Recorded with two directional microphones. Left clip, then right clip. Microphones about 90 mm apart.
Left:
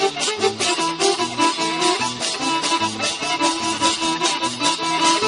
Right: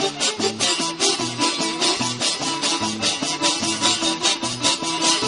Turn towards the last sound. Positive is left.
turn(degrees=30)  # may be behind; listen again after turning